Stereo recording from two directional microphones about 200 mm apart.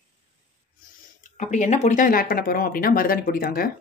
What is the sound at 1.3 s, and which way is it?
Speech, 35° left (ahead or behind).